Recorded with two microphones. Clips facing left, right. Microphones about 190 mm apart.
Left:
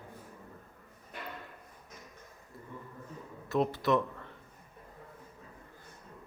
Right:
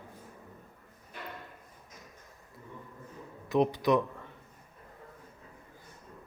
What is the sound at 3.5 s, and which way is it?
Speech, 15° right (ahead or behind).